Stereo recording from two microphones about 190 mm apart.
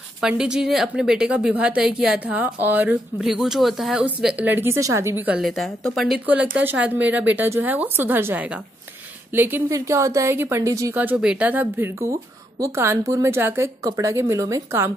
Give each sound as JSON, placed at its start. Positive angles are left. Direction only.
{"t": 0.2, "sound": "a woman's voice", "side_deg": -5}